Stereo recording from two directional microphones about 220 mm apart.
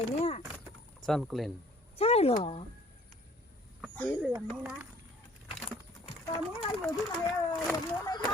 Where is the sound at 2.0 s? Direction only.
25° left (ahead or behind).